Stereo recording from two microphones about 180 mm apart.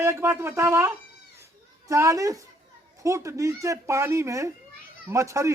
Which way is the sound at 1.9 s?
15° right (ahead or behind).